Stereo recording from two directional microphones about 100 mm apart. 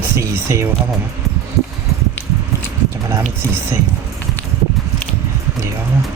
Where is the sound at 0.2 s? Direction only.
30° right (ahead or behind).